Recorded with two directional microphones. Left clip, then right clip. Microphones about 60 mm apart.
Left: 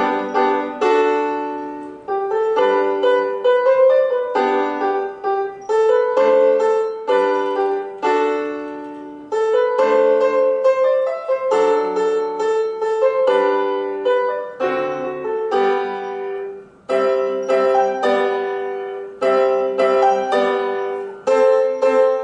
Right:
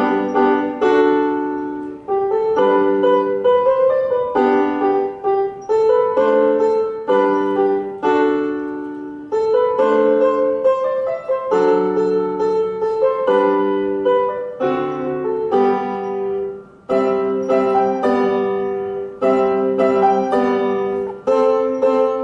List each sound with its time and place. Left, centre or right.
0.2 s music: centre
1.1 s music: centre
2.2 s music: centre
3.8 s music: centre
9.5 s music: centre
14.6 s music: centre
16.9 s music: left
18.1 s music: centre
19.2 s music: centre
20.6 s music: centre
21.3 s music: left